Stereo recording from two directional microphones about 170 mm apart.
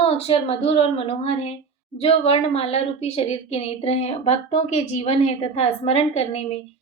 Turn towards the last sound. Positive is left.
turn(degrees=35)  # may be behind; listen again after turning